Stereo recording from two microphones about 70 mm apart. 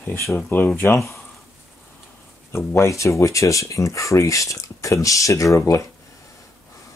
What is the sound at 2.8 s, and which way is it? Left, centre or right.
Speech, left.